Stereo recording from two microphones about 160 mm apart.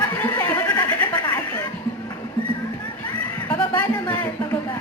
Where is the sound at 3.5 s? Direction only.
10° left (ahead or behind).